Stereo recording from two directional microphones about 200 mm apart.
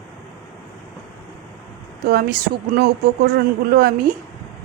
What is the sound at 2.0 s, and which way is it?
A woman's voice, 50° right (ahead or behind).